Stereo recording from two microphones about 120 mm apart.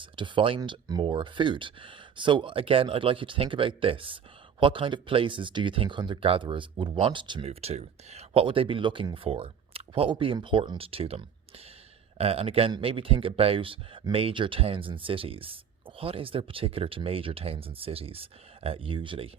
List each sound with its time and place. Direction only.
0.0 s speech: 45° right (ahead or behind)
7.4 s speech: 60° right (ahead or behind)